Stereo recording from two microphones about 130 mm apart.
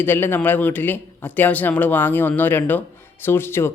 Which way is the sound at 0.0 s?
15° left (ahead or behind).